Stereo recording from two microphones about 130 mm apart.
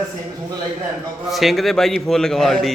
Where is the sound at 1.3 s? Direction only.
Centre (ahead or behind).